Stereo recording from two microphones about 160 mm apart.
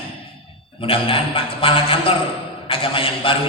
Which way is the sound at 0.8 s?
35° left (ahead or behind).